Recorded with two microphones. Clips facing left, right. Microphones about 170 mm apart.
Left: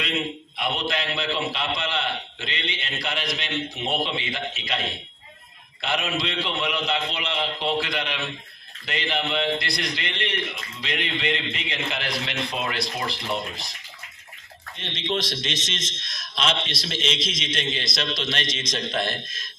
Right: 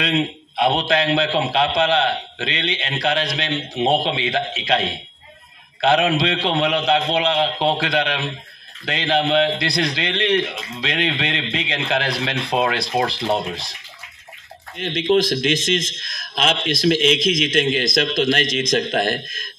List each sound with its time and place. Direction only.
0.0 s a man's voice: 90° right
15.0 s a man's voice: 50° right (ahead or behind)